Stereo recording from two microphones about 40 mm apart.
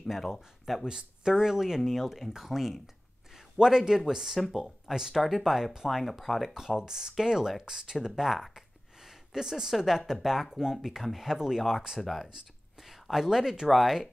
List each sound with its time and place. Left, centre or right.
0.3 s speech: centre
0.8 s speech: centre
3.5 s speech: centre
5.1 s speech: centre
5.4 s speech: centre
5.9 s speech: centre
6.5 s speech: centre